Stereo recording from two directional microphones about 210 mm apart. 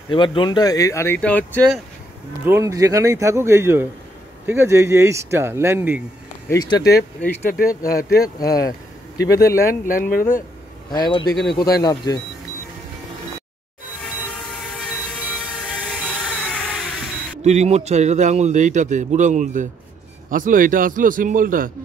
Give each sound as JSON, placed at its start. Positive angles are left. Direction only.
{"t": 0.1, "sound": "speech", "side_deg": 25}
{"t": 2.4, "sound": "speech", "side_deg": -15}
{"t": 6.5, "sound": "speech", "side_deg": 15}
{"t": 7.4, "sound": "speech", "side_deg": 45}
{"t": 8.2, "sound": "speech", "side_deg": 15}
{"t": 9.8, "sound": "speech", "side_deg": 45}
{"t": 10.9, "sound": "speech", "side_deg": 20}
{"t": 15.7, "sound": "music", "side_deg": 5}
{"t": 17.4, "sound": "a man's voice", "side_deg": -30}